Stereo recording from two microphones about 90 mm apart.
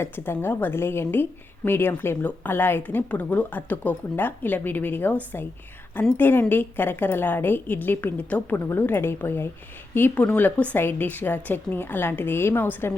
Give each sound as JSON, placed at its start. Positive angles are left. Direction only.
{"t": 0.0, "sound": "a woman's voice", "side_deg": 25}